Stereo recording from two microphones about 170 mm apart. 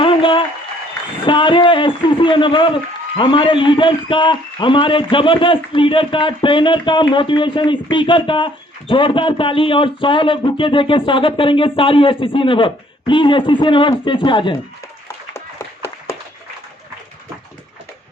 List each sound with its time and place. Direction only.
0.0 s applause: 30° left (ahead or behind)
1.3 s a man's voice: 30° left (ahead or behind)
15.0 s a sound: 15° left (ahead or behind)